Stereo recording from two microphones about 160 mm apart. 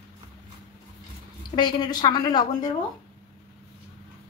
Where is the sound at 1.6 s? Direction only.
25° left (ahead or behind).